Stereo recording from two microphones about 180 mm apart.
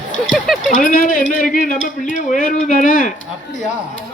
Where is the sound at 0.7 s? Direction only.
50° left (ahead or behind).